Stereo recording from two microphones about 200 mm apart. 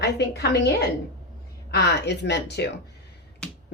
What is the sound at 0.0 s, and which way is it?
Speech, 55° left (ahead or behind).